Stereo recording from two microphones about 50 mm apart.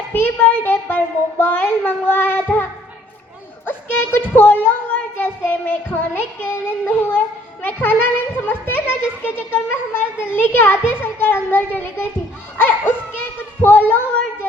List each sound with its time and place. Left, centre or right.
0.1 s a child's voice: left
3.7 s speech: left
5.5 s child singing: left
7.6 s a child's voice: left